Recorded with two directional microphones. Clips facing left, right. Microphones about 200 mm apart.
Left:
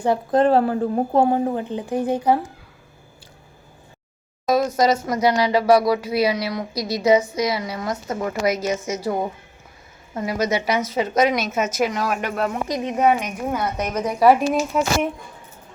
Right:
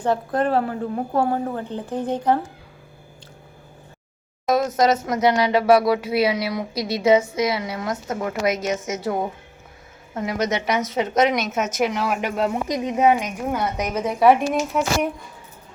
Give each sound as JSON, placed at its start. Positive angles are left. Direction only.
{"t": 0.0, "sound": "speech", "side_deg": 10}
{"t": 0.3, "sound": "speech", "side_deg": 30}
{"t": 4.4, "sound": "a woman's voice", "side_deg": 0}
{"t": 6.7, "sound": "speech", "side_deg": -25}
{"t": 7.0, "sound": "a woman's voice", "side_deg": -5}
{"t": 13.4, "sound": "a woman's voice", "side_deg": 0}
{"t": 13.7, "sound": "a woman's voice", "side_deg": -10}